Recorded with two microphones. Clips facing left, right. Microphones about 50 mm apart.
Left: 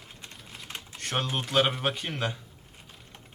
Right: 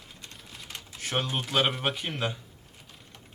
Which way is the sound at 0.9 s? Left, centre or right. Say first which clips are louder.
Even; centre.